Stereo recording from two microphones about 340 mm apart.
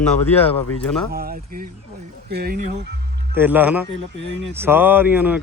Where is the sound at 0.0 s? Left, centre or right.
Centre.